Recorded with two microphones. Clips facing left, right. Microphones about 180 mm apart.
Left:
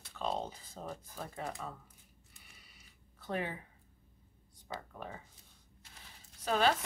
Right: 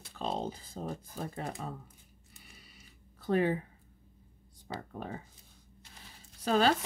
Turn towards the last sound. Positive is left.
turn(degrees=-35)  # may be behind; listen again after turning